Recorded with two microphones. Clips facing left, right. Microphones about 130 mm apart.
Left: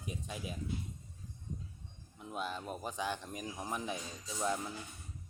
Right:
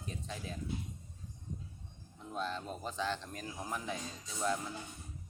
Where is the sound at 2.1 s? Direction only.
10° left (ahead or behind).